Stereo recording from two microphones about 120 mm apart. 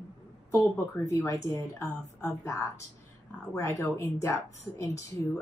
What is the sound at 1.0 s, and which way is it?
Speech, 30° left (ahead or behind).